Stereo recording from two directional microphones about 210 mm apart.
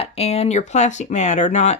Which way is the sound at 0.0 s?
30° left (ahead or behind).